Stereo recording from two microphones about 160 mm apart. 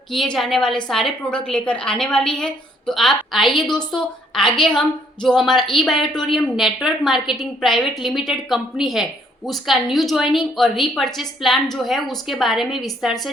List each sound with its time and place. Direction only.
0.3 s a woman's voice: centre (ahead or behind)